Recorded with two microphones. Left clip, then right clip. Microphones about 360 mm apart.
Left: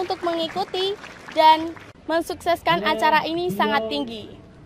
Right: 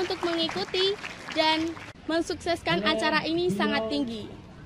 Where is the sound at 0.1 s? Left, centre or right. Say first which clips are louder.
Left 4 dB; centre.